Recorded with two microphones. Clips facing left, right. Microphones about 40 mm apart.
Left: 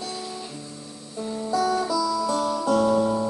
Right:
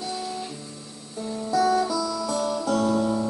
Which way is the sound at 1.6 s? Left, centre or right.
Centre.